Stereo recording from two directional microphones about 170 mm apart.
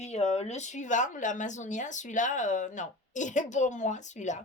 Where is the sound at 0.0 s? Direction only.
40° left (ahead or behind).